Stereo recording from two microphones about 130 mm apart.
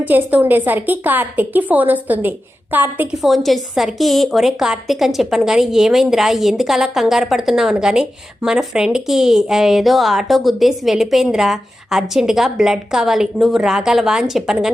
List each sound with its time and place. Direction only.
0.0 s a woman's voice: 10° right (ahead or behind)
3.2 s a woman's voice: centre (ahead or behind)